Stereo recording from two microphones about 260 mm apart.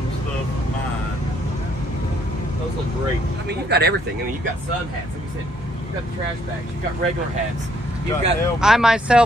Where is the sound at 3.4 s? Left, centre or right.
Right.